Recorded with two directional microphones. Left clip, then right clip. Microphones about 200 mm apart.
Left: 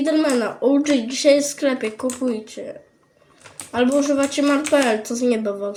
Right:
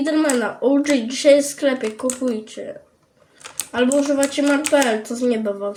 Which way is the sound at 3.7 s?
Centre (ahead or behind).